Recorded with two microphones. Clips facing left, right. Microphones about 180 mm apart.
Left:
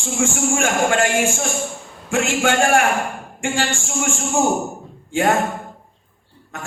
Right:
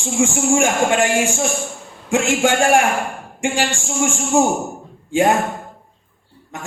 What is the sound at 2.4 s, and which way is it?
Speech, 15° right (ahead or behind).